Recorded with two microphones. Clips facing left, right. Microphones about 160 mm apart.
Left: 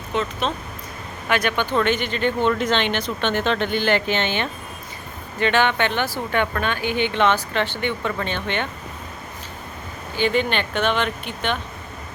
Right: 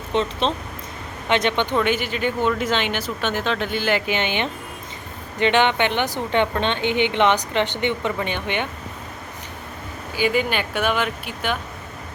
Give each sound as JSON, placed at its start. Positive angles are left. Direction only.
{"t": 0.1, "sound": "speech", "side_deg": -30}
{"t": 1.8, "sound": "speech", "side_deg": -10}
{"t": 10.2, "sound": "speech", "side_deg": -10}